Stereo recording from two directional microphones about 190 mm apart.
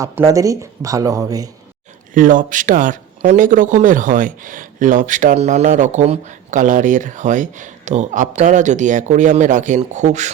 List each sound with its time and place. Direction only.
0.0 s speech: 15° right (ahead or behind)
2.1 s speech: 45° right (ahead or behind)